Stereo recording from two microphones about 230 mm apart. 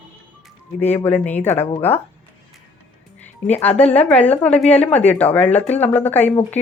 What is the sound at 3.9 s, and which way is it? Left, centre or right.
A woman's voice, centre.